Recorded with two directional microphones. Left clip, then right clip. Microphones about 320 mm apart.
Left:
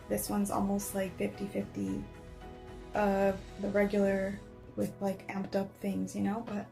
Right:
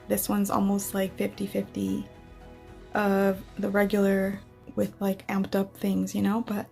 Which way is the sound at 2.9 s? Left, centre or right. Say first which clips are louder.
Right 4 dB; right.